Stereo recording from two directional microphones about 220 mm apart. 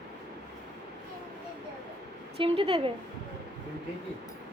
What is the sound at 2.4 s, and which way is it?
Speech, 25° right (ahead or behind).